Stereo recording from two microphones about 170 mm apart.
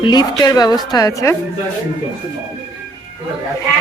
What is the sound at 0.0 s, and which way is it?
A woman's voice, 25° left (ahead or behind).